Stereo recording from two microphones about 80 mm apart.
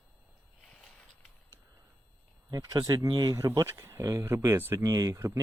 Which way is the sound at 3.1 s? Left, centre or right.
Right.